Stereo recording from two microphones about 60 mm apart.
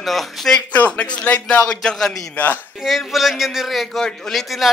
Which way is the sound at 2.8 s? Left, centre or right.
Centre.